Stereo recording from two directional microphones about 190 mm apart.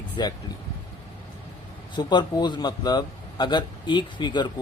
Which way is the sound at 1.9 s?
25° left (ahead or behind).